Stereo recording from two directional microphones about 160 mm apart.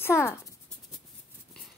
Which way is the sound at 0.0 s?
15° left (ahead or behind).